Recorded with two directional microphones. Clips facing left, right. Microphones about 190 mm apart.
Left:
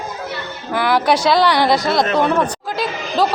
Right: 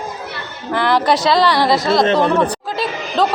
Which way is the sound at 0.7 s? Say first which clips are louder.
Right 1 dB; 5° left (ahead or behind).